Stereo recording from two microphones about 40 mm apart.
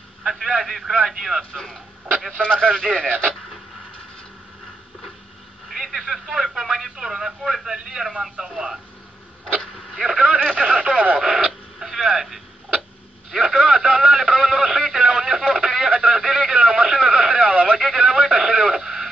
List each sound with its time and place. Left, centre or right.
0.2 s a man's voice: centre
2.5 s speech: right
5.7 s a man's voice: centre
10.0 s speech: right
11.1 s a man's voice: centre
11.8 s a sound: centre
17.7 s radio: centre